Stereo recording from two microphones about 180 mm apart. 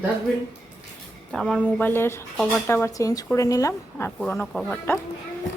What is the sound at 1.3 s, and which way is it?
A woman's voice, centre (ahead or behind).